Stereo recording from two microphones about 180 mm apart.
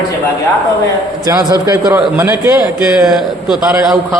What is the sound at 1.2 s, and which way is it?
A man's voice, 20° right (ahead or behind).